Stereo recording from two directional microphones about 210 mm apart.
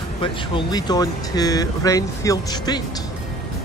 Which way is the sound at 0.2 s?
25° left (ahead or behind).